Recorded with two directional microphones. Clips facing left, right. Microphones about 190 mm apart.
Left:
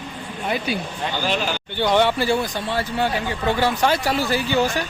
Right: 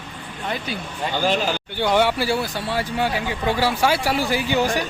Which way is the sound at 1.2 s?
45° right (ahead or behind).